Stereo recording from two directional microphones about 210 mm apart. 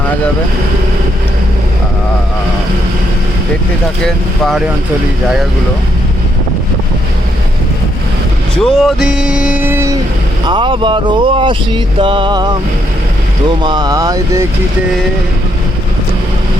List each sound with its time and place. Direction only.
4.0 s speech: centre (ahead or behind)
8.5 s speech: centre (ahead or behind)
10.4 s speech: 20° right (ahead or behind)
13.6 s speech: 20° right (ahead or behind)